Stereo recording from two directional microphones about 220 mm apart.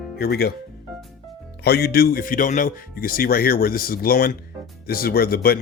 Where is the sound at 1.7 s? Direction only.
45° left (ahead or behind).